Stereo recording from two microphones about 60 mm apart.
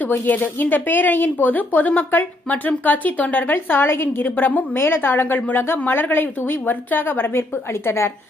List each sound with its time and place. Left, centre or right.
0.3 s speech: left